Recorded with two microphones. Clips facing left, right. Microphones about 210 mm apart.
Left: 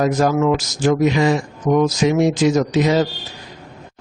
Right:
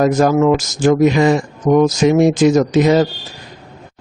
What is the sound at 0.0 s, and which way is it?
Speech, 50° right (ahead or behind).